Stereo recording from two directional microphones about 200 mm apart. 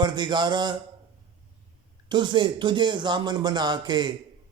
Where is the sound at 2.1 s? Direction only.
20° right (ahead or behind).